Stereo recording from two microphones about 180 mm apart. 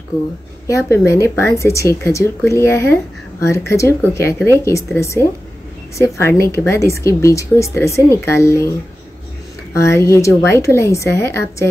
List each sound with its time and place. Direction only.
0.7 s a woman's voice: 15° left (ahead or behind)
9.8 s a woman's voice: 15° left (ahead or behind)